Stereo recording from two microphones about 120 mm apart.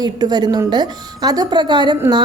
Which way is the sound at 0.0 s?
35° right (ahead or behind).